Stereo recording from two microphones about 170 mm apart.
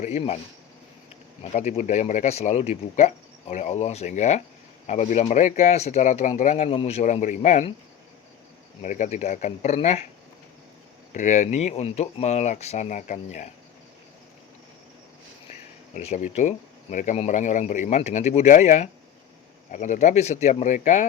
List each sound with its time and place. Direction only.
0.0 s speech: 40° left (ahead or behind)
1.4 s speech: 40° left (ahead or behind)
8.8 s speech: 45° left (ahead or behind)
11.1 s speech: 45° left (ahead or behind)
16.0 s speech: 45° left (ahead or behind)